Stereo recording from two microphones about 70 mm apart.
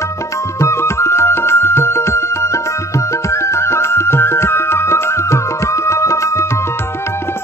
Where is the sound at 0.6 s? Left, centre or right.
Left.